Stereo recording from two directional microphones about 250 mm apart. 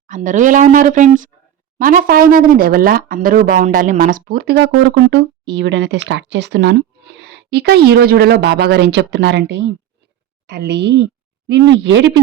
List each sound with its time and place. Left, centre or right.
0.1 s speech: right